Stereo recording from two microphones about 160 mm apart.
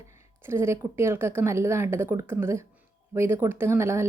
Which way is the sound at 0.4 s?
15° right (ahead or behind).